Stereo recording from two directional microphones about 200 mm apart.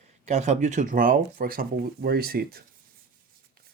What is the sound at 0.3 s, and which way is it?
Speech, 35° right (ahead or behind).